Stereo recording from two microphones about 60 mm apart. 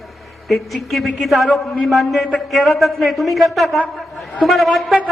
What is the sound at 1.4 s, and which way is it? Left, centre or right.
Speech, centre.